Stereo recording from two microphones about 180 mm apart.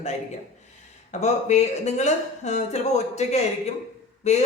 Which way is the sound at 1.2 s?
40° left (ahead or behind).